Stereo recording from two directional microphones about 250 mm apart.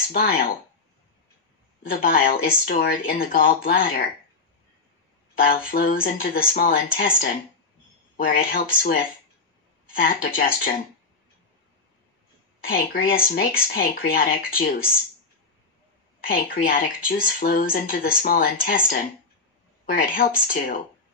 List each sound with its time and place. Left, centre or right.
0.1 s speech: left
1.8 s speech: left
5.7 s speech: left
12.6 s speech: left
16.2 s speech: left
19.9 s speech: left